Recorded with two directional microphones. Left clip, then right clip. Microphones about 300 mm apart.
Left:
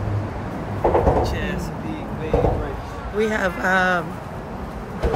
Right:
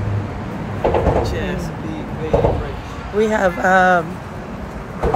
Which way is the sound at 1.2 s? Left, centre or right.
Centre.